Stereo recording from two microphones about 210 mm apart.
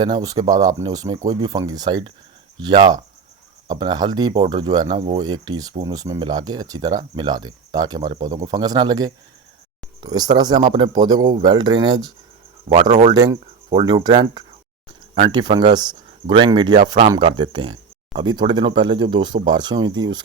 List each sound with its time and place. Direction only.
0.0 s speech: 20° right (ahead or behind)
3.7 s speech: 20° right (ahead or behind)
12.7 s speech: 30° right (ahead or behind)
13.1 s speech: 20° right (ahead or behind)